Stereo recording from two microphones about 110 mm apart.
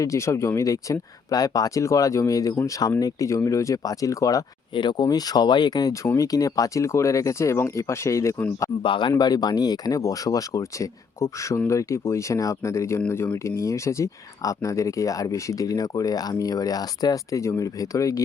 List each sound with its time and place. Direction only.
0.0 s speech: 30° left (ahead or behind)
4.7 s speech: 45° left (ahead or behind); by 8.7 s 25° left (ahead or behind)
8.8 s speech: 45° left (ahead or behind); by 18.2 s 30° left (ahead or behind)